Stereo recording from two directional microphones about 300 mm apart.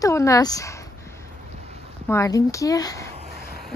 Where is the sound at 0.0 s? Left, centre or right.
Centre.